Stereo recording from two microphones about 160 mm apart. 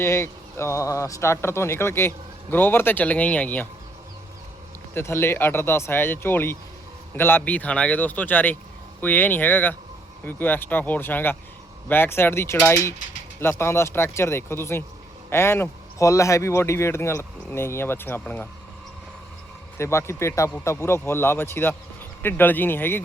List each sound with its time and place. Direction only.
0.0 s speech: 15° left (ahead or behind)
4.9 s speech: 15° left (ahead or behind)
19.8 s speech: 15° left (ahead or behind)